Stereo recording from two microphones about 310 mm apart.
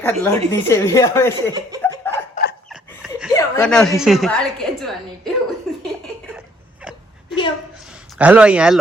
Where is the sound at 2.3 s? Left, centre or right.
Left.